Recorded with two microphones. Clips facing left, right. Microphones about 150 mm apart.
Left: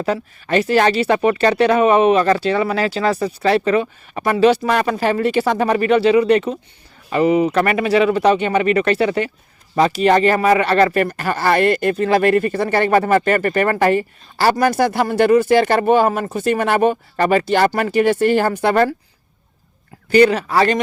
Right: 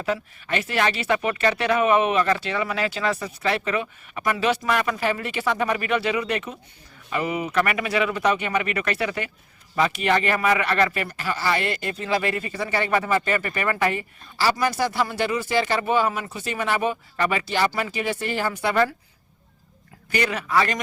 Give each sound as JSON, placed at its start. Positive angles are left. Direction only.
{"t": 0.0, "sound": "speech", "side_deg": 40}
{"t": 10.9, "sound": "speech", "side_deg": 50}
{"t": 14.3, "sound": "speech", "side_deg": 50}
{"t": 17.2, "sound": "speech", "side_deg": 40}
{"t": 20.1, "sound": "speech", "side_deg": 35}